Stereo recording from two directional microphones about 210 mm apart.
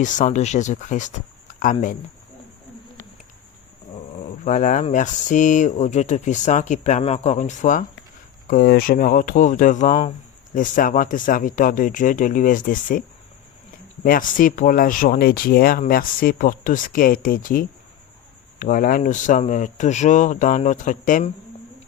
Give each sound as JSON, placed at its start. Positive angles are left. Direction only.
{"t": 0.0, "sound": "speech", "side_deg": 35}
{"t": 4.4, "sound": "speech", "side_deg": 35}